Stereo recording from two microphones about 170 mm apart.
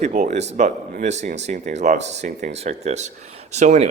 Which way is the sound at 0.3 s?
40° right (ahead or behind).